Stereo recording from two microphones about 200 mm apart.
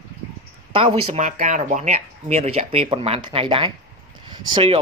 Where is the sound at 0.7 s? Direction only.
30° right (ahead or behind).